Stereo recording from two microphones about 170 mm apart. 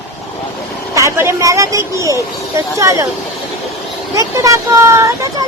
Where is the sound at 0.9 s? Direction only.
15° right (ahead or behind).